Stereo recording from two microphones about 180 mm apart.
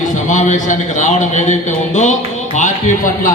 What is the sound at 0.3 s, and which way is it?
A man's voice, 45° left (ahead or behind).